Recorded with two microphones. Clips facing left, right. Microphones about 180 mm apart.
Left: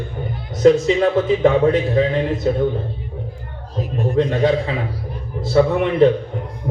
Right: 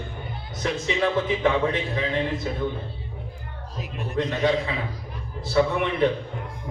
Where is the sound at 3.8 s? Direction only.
35° left (ahead or behind).